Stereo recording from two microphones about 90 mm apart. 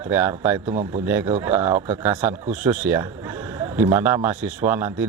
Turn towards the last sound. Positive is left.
turn(degrees=-20)  # may be behind; listen again after turning